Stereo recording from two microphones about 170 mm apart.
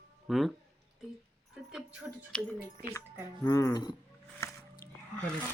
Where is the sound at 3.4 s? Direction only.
15° left (ahead or behind).